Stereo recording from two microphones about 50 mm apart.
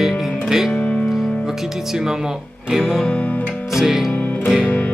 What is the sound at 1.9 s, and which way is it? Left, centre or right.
Speech, centre.